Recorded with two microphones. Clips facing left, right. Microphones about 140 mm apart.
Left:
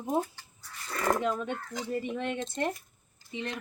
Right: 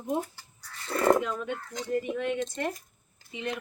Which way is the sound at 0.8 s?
25° right (ahead or behind).